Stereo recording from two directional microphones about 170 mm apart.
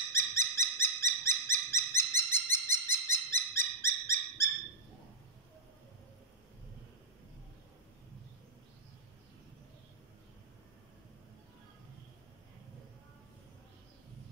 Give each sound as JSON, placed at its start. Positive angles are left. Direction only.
{"t": 0.1, "sound": "dog", "side_deg": 15}